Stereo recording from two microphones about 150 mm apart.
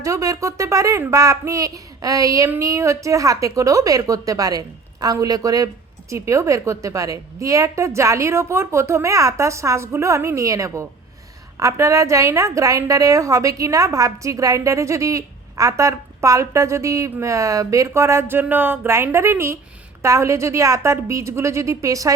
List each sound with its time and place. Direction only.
0.0 s a woman's voice: 20° right (ahead or behind)